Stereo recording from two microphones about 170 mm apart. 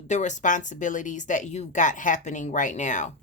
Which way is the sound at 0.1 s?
45° left (ahead or behind).